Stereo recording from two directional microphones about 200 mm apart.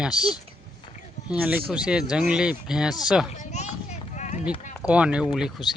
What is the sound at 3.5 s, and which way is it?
Clip-clop, 35° left (ahead or behind).